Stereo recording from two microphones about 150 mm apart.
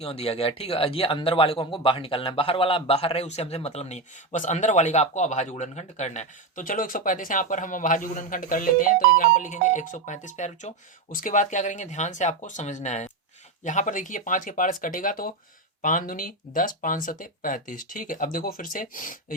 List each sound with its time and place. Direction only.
0.0 s speech: 40° left (ahead or behind); by 19.2 s 65° left (ahead or behind)